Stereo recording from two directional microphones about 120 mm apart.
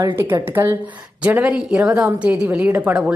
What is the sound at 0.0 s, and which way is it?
A woman's voice, 20° right (ahead or behind).